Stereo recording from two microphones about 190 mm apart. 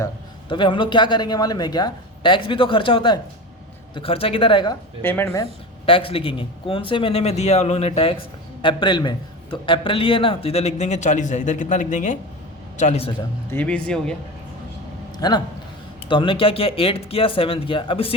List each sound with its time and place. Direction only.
0.4 s speech: 25° left (ahead or behind)
5.0 s speech: 10° left (ahead or behind)
5.8 s a man's voice: 30° left (ahead or behind)
13.5 s speech: 5° left (ahead or behind)
15.2 s speech: 20° left (ahead or behind)